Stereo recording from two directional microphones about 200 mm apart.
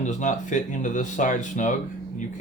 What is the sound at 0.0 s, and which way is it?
Speech, 40° left (ahead or behind).